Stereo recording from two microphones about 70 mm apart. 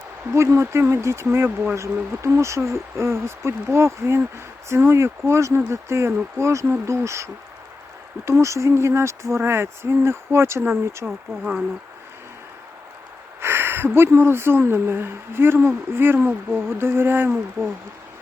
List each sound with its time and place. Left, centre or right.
0.3 s speech: right
11.0 s speech: centre
13.4 s speech: right